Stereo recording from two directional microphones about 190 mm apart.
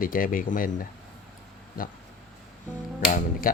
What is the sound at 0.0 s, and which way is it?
Speech, 45° left (ahead or behind).